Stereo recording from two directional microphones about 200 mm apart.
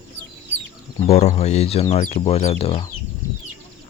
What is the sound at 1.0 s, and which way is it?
Speech, 35° left (ahead or behind).